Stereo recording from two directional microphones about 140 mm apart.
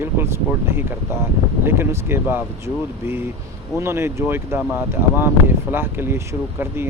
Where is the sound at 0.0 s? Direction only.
15° right (ahead or behind).